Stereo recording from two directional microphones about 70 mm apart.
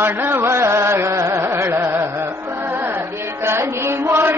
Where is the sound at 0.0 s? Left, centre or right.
Right.